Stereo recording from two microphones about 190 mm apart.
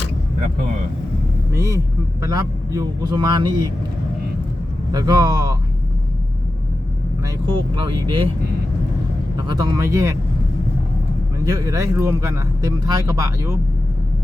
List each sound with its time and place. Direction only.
1.5 s a man's voice: 15° right (ahead or behind)
4.9 s a man's voice: 20° right (ahead or behind)
7.4 s a man's voice: 25° right (ahead or behind)
9.5 s a man's voice: 20° right (ahead or behind)
11.4 s a man's voice: 20° right (ahead or behind)